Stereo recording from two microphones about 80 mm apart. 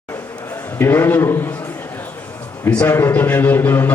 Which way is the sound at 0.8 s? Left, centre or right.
Left.